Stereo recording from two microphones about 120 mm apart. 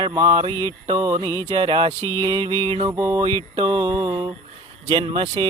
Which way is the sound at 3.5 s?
35° right (ahead or behind).